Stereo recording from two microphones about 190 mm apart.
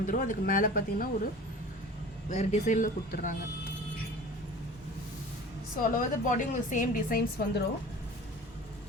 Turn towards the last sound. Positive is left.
turn(degrees=55)  # may be behind; listen again after turning